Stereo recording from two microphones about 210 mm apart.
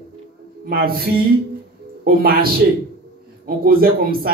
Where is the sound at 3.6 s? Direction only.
45° right (ahead or behind).